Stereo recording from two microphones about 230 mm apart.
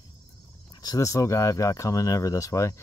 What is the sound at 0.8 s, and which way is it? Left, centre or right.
Speech, centre.